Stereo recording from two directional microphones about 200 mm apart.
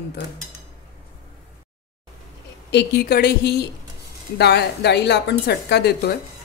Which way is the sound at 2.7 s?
55° left (ahead or behind).